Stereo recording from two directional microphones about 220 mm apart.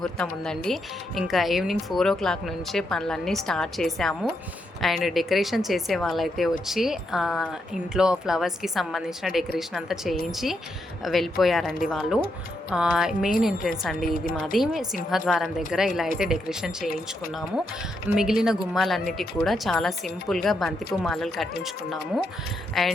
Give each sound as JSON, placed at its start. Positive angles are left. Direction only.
{"t": 0.0, "sound": "a woman's voice", "side_deg": 0}
{"t": 14.0, "sound": "a woman's voice", "side_deg": 40}
{"t": 14.3, "sound": "a woman's voice", "side_deg": 0}
{"t": 18.1, "sound": "a woman's voice", "side_deg": -5}